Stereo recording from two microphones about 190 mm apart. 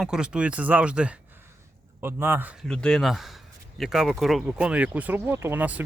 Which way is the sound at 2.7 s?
5° left (ahead or behind).